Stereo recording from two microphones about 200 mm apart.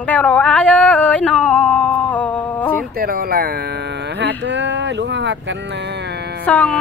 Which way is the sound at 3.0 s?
50° right (ahead or behind).